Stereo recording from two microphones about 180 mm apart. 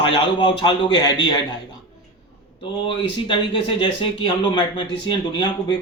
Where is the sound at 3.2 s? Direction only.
30° left (ahead or behind).